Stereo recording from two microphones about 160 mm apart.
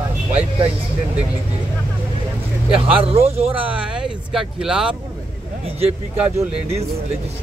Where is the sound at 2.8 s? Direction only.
35° right (ahead or behind).